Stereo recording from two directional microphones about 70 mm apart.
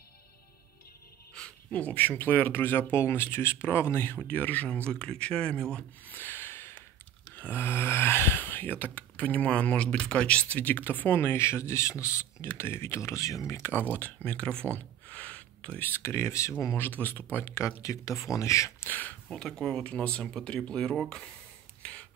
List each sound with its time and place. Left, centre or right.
1.7 s speech: left
6.1 s a sound: left
7.3 s speech: left
17.8 s speech: left
18.8 s speech: left
19.2 s speech: centre